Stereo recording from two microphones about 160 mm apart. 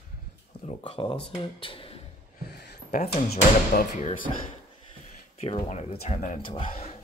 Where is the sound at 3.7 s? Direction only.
50° left (ahead or behind).